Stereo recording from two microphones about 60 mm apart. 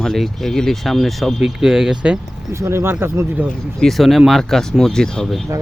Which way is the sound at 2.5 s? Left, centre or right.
Right.